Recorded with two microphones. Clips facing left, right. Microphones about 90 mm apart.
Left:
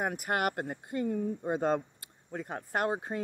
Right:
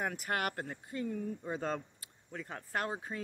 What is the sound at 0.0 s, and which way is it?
Speech, 20° left (ahead or behind).